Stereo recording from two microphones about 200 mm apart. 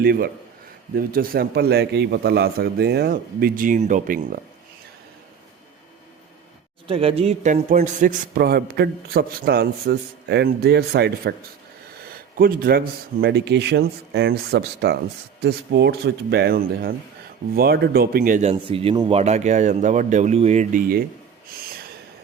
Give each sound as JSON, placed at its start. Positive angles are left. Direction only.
{"t": 0.0, "sound": "a man's voice", "side_deg": -50}
{"t": 6.8, "sound": "a man's voice", "side_deg": -30}
{"t": 12.0, "sound": "a sound", "side_deg": -45}
{"t": 13.2, "sound": "a man's voice", "side_deg": -55}